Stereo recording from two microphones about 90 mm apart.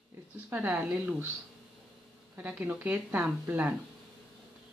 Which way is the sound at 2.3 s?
20° right (ahead or behind).